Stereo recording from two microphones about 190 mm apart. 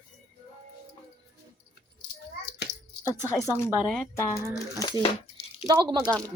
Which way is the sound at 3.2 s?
15° left (ahead or behind).